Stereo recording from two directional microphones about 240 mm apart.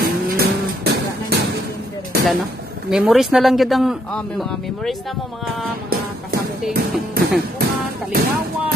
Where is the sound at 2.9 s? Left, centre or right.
Centre.